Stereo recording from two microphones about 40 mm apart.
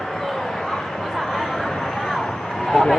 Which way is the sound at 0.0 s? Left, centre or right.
Centre.